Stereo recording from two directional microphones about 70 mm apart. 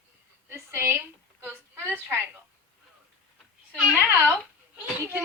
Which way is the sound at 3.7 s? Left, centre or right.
Centre.